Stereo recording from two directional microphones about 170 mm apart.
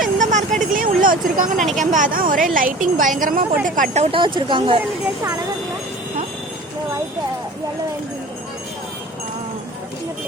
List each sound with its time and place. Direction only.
0.2 s vehicle: 45° right (ahead or behind)
1.0 s a woman's voice: 55° right (ahead or behind); by 4.8 s 30° right (ahead or behind)